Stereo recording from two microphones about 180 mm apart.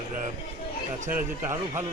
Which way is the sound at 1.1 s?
15° right (ahead or behind).